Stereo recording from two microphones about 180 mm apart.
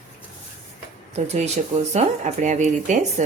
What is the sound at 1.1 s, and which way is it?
Speech, 35° right (ahead or behind).